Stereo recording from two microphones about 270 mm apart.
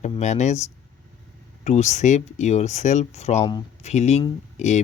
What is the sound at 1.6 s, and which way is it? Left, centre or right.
Speech, left.